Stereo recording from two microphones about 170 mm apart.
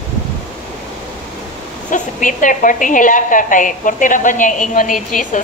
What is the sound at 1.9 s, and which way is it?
A woman's voice, 50° left (ahead or behind).